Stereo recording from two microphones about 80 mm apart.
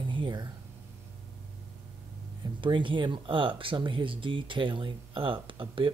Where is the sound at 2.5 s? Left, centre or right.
Right.